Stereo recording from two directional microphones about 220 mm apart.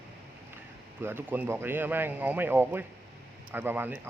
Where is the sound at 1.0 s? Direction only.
10° right (ahead or behind).